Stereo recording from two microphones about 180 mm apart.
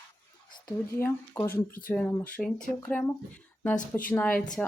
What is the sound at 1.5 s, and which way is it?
Speech, 55° left (ahead or behind).